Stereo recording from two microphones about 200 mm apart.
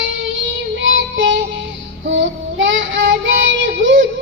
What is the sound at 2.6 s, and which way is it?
Child singing, 70° right (ahead or behind).